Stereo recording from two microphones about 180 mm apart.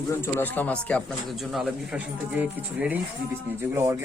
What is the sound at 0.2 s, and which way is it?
Speech, 10° left (ahead or behind).